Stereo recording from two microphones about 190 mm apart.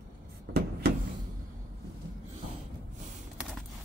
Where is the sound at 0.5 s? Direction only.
55° right (ahead or behind).